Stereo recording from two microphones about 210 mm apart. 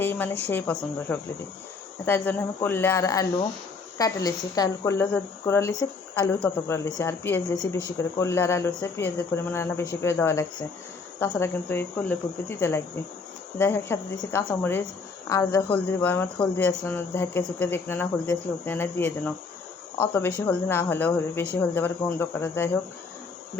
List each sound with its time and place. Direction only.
0.0 s speech: 10° left (ahead or behind)
20.4 s speech: 10° left (ahead or behind)